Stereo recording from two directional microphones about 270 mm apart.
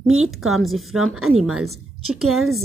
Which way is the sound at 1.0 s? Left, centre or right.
Right.